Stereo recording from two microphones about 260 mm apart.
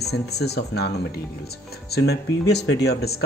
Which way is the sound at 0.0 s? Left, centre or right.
Left.